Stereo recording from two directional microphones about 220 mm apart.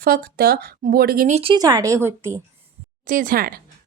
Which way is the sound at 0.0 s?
45° right (ahead or behind).